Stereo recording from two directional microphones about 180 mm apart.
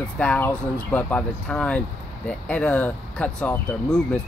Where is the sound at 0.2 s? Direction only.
5° left (ahead or behind).